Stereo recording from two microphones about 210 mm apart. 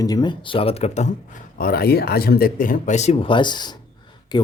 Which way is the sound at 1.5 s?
45° left (ahead or behind).